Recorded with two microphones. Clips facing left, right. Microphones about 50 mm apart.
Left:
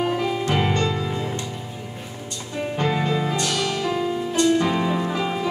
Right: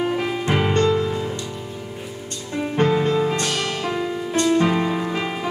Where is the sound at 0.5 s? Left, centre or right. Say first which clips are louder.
Right 3 dB; centre.